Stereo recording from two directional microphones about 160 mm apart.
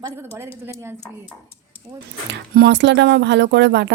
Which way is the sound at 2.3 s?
90° right.